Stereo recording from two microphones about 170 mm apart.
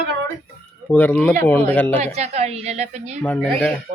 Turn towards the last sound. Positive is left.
turn(degrees=10)  # may be behind; listen again after turning